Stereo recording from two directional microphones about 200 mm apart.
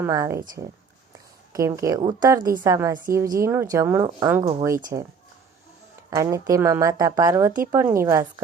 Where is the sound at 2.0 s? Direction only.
25° right (ahead or behind).